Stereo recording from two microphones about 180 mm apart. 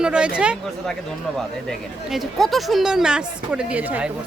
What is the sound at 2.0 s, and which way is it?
Speech, centre (ahead or behind).